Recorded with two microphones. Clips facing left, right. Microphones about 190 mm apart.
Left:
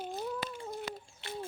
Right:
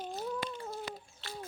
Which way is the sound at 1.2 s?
20° left (ahead or behind).